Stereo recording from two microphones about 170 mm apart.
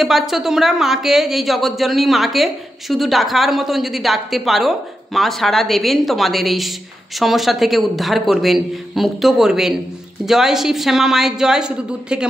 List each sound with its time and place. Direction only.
0.0 s speech: centre (ahead or behind)